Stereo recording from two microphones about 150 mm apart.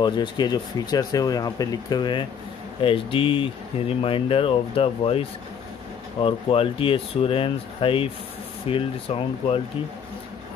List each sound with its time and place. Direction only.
0.0 s speech: 30° left (ahead or behind)
6.2 s speech: 35° left (ahead or behind)